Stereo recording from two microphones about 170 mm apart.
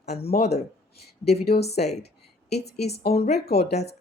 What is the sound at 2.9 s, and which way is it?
Speech, 65° left (ahead or behind).